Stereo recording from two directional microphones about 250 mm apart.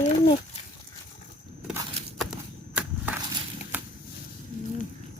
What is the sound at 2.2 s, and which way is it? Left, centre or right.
Walk, centre.